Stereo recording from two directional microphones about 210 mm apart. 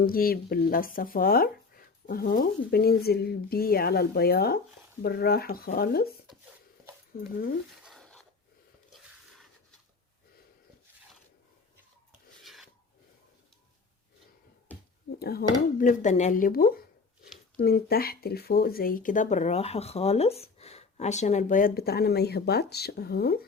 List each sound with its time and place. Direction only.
0.0 s speech: 45° left (ahead or behind)
7.9 s a sound: centre (ahead or behind)
8.9 s biting: centre (ahead or behind)
12.4 s filing: centre (ahead or behind)
15.2 s speech: 45° left (ahead or behind)
15.8 s speech: 35° left (ahead or behind)